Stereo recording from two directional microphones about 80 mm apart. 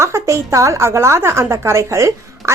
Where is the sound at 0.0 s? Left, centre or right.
Right.